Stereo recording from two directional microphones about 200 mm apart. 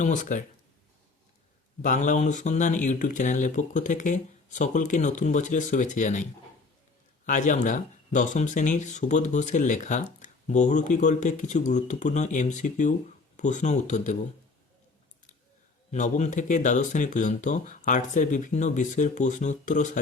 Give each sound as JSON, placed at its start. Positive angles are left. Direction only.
{"t": 0.0, "sound": "speech", "side_deg": 40}
{"t": 1.8, "sound": "speech", "side_deg": 40}
{"t": 7.3, "sound": "speech", "side_deg": 40}
{"t": 15.9, "sound": "speech", "side_deg": 35}